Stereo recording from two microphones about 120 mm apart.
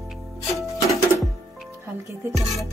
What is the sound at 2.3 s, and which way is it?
Music, centre (ahead or behind).